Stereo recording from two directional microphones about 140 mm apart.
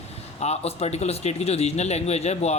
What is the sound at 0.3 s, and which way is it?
Speech, 50° left (ahead or behind).